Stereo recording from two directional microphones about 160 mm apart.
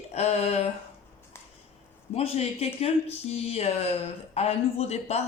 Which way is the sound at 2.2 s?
40° left (ahead or behind).